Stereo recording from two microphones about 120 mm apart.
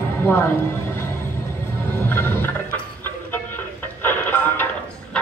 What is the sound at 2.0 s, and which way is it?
Music, 15° left (ahead or behind).